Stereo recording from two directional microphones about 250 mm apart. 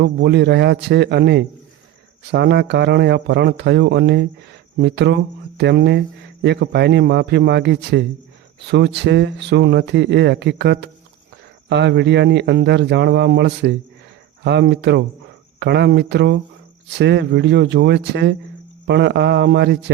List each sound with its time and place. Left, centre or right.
0.0 s speech: right